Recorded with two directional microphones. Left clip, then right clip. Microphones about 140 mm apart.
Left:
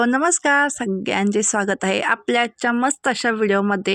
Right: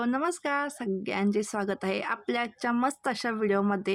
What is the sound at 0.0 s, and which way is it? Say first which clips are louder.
Speech: left 11 dB; 55° left (ahead or behind).